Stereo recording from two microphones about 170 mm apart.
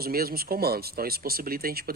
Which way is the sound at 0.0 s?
60° right (ahead or behind).